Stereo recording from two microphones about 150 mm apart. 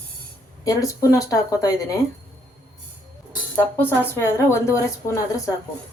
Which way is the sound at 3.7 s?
15° left (ahead or behind).